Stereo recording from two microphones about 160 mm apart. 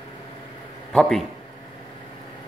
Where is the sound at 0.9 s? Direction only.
Centre (ahead or behind).